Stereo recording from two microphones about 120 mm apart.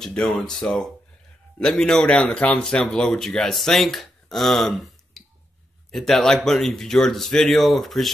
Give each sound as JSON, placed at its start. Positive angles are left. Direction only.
{"t": 0.0, "sound": "speech", "side_deg": 5}